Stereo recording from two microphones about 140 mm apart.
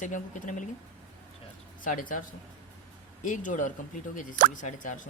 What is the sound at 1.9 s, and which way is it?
Speech, 75° left (ahead or behind).